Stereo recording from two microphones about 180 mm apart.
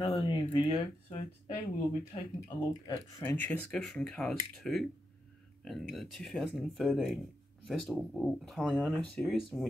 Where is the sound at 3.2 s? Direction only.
10° left (ahead or behind).